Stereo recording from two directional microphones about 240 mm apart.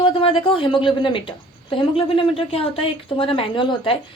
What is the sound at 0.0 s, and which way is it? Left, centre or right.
A woman's voice, left.